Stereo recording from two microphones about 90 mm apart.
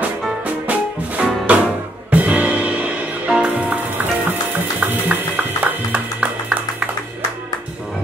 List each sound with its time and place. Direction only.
0.7 s music: 15° right (ahead or behind)
5.6 s music: 15° right (ahead or behind)